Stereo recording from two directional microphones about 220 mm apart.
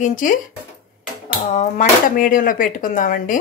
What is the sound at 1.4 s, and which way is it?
Speech, 35° left (ahead or behind).